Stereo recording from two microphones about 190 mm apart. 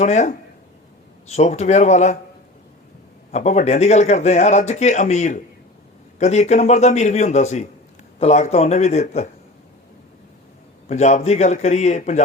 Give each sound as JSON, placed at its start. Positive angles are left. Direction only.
{"t": 0.0, "sound": "speech", "side_deg": 40}
{"t": 3.3, "sound": "speech", "side_deg": 35}
{"t": 10.8, "sound": "speech", "side_deg": 35}